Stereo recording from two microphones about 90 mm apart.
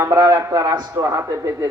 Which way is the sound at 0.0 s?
45° right (ahead or behind).